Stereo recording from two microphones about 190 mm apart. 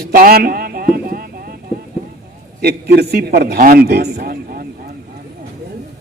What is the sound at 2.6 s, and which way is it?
A man's voice, 55° right (ahead or behind).